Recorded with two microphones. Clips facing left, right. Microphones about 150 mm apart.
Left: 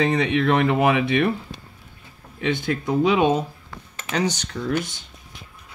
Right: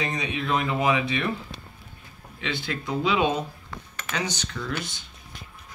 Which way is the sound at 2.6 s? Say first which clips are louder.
Left 6 dB; 45° left (ahead or behind).